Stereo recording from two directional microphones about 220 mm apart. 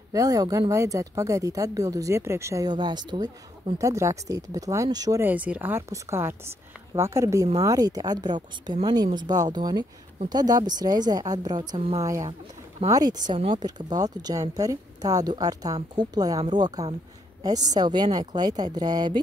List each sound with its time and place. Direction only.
0.1 s speech: 15° right (ahead or behind)
12.8 s speech: 25° right (ahead or behind)